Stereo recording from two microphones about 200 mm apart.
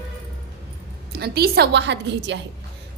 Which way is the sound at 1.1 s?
55° right (ahead or behind).